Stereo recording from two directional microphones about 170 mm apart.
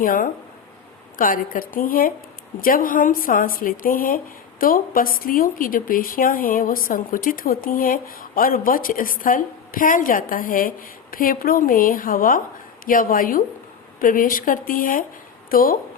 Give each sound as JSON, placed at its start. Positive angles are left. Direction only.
{"t": 0.0, "sound": "speech", "side_deg": 55}